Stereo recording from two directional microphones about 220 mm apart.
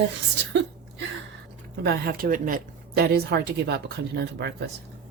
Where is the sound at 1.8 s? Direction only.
45° right (ahead or behind).